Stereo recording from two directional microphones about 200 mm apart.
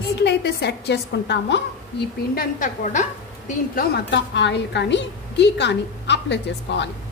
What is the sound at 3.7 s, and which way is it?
A woman's voice, 55° left (ahead or behind).